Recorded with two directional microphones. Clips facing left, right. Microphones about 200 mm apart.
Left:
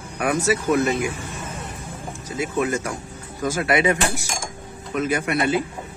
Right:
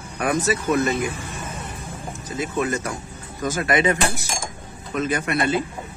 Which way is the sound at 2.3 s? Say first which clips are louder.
Left 1 dB; 10° left (ahead or behind).